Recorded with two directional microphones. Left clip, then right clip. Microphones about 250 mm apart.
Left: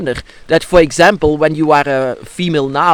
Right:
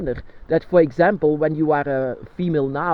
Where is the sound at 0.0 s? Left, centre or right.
Left.